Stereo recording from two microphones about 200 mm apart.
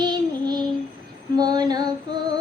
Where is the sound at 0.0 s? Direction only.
20° right (ahead or behind).